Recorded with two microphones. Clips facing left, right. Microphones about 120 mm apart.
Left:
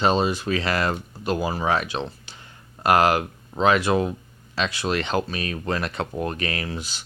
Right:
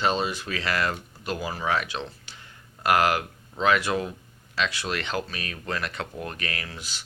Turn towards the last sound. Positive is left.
turn(degrees=25)  # may be behind; listen again after turning